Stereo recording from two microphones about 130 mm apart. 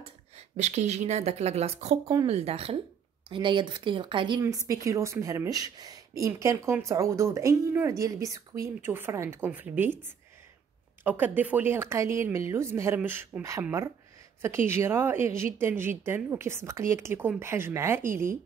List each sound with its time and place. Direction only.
0.4 s a woman's voice: 60° right (ahead or behind); by 4.4 s 40° right (ahead or behind)
4.4 s a woman's voice: 25° right (ahead or behind)